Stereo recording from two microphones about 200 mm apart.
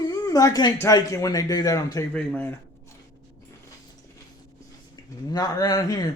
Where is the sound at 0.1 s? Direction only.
15° left (ahead or behind).